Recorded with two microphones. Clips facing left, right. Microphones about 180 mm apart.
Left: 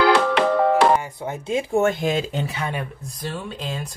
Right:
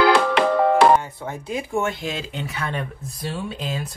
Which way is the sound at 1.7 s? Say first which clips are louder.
Left 6 dB; 45° left (ahead or behind).